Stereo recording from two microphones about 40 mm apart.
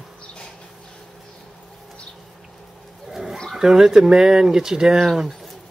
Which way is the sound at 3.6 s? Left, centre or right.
Centre.